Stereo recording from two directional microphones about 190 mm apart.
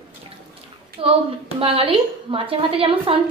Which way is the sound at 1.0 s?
30° right (ahead or behind).